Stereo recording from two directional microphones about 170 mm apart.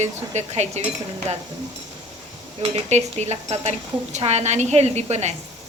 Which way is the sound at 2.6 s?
40° right (ahead or behind).